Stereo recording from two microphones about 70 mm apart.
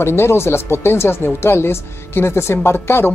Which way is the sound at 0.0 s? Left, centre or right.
Left.